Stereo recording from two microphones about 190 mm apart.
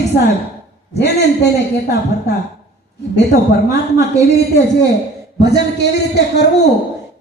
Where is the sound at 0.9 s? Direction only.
65° left (ahead or behind).